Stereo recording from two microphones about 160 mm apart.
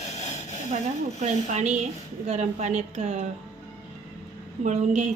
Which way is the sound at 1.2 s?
45° right (ahead or behind).